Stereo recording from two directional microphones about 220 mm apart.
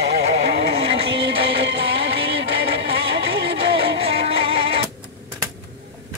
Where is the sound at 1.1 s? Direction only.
50° right (ahead or behind).